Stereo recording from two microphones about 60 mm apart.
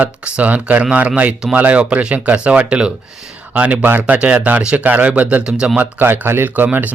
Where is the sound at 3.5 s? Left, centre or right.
Right.